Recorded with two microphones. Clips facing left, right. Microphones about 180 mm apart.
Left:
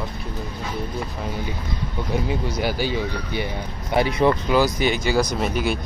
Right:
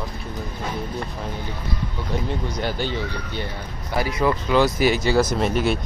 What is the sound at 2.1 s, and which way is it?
Speech, 10° left (ahead or behind).